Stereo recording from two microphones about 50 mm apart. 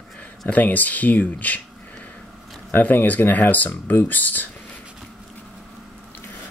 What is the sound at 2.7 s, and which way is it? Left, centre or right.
Speech, left.